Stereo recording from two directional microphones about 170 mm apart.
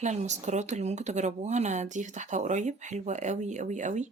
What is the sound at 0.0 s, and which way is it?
Speech, 45° right (ahead or behind).